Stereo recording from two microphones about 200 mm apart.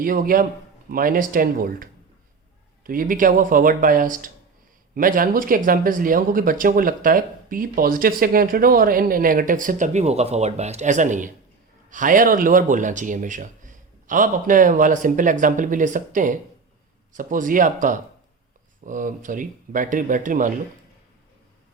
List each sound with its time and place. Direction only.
0.0 s speech: 45° right (ahead or behind)